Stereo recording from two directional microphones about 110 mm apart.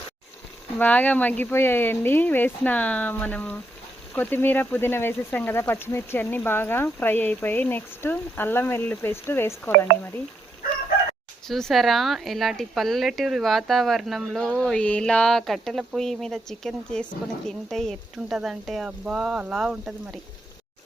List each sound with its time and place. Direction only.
0.8 s speech: 15° left (ahead or behind)
11.4 s speech: 5° left (ahead or behind)